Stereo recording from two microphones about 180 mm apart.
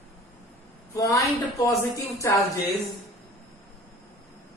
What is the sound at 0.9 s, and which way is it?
A woman's voice, 20° left (ahead or behind).